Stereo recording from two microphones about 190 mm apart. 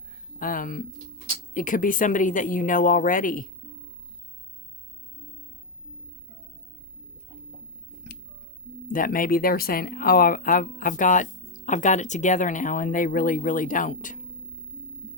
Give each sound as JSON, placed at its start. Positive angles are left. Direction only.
{"t": 0.3, "sound": "speech", "side_deg": 45}
{"t": 8.1, "sound": "music", "side_deg": 60}
{"t": 8.9, "sound": "speech", "side_deg": 45}